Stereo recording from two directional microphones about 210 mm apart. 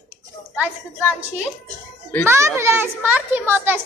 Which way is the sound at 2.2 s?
10° right (ahead or behind).